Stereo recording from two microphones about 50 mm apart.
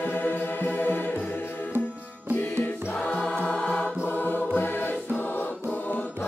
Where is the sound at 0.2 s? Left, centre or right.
Left.